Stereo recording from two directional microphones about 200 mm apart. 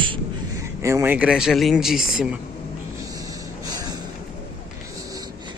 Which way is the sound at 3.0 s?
15° right (ahead or behind).